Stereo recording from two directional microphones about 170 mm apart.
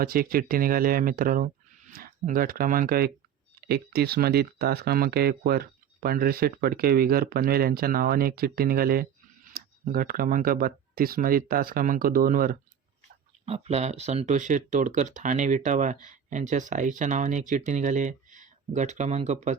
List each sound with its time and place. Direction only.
0.0 s speech: 60° right (ahead or behind)
3.6 s speech: 70° right (ahead or behind)
13.4 s speech: 40° right (ahead or behind)